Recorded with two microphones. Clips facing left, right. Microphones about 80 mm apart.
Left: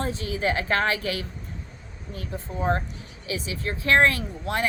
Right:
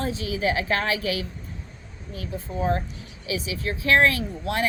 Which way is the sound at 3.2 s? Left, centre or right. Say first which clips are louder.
Right 2 dB; left.